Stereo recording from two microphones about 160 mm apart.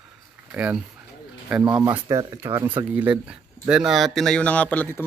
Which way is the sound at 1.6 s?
25° right (ahead or behind).